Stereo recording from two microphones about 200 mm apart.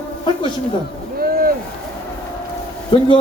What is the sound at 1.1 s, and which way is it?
Rowboat, 50° right (ahead or behind).